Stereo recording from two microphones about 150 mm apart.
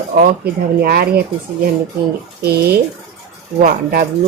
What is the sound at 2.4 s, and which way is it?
Speech, 90° right.